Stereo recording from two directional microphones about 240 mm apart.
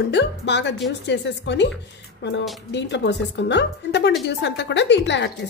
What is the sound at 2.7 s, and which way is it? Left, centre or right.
A woman's voice, left.